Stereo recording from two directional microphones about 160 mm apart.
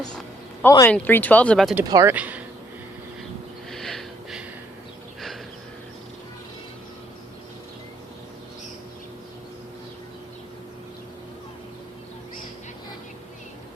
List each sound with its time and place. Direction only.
0.6 s speech: 15° left (ahead or behind)
1.8 s speech: 20° right (ahead or behind)
2.1 s speech: 10° right (ahead or behind)
3.7 s a sound: centre (ahead or behind)